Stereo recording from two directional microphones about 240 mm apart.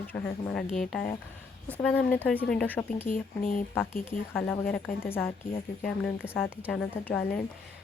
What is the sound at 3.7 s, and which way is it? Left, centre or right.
A woman's voice, centre.